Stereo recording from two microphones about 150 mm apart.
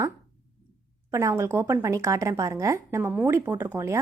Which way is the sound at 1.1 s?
20° right (ahead or behind).